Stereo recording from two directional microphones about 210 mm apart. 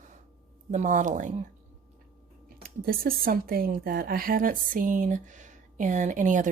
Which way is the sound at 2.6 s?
45° right (ahead or behind).